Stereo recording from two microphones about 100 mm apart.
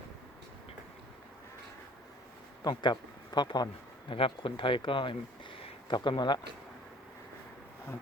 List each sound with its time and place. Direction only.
2.6 s speech: 45° left (ahead or behind)
4.1 s speech: 60° left (ahead or behind)